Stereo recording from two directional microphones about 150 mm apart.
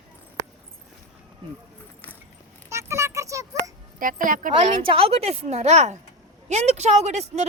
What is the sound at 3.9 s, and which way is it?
Speech, 65° right (ahead or behind).